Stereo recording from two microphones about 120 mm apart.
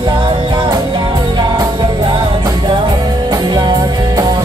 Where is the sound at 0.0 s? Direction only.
45° right (ahead or behind).